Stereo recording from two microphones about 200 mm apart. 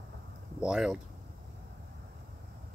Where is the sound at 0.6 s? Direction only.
5° right (ahead or behind).